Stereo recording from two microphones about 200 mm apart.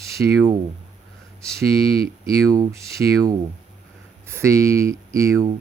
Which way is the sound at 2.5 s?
15° right (ahead or behind).